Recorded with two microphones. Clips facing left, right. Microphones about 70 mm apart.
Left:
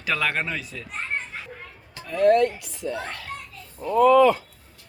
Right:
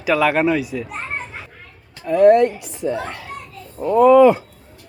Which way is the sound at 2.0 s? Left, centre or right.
Right.